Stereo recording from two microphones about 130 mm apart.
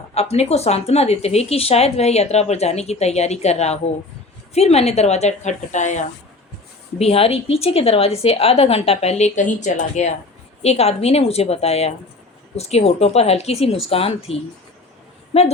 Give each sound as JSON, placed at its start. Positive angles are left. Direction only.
{"t": 0.1, "sound": "speech", "side_deg": 55}
{"t": 7.0, "sound": "a woman's voice", "side_deg": 50}
{"t": 10.6, "sound": "a woman's voice", "side_deg": 55}